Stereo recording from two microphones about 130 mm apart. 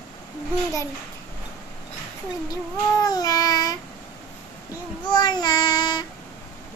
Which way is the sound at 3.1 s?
30° left (ahead or behind).